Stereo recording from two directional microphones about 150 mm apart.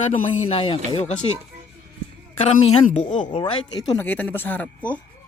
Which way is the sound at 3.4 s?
35° left (ahead or behind).